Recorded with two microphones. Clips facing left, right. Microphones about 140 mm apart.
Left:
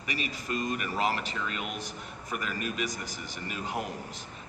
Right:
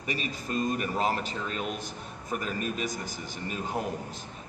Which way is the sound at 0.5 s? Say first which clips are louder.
Right 3 dB; 30° right (ahead or behind).